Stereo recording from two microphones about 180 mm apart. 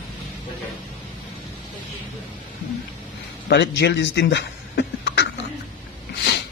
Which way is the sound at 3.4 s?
70° left (ahead or behind).